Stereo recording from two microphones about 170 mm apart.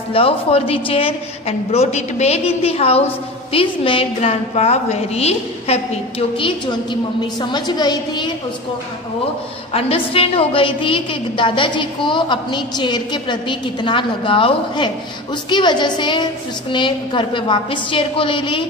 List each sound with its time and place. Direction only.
0.1 s a woman's voice: 35° left (ahead or behind)
9.7 s a woman's voice: 35° left (ahead or behind)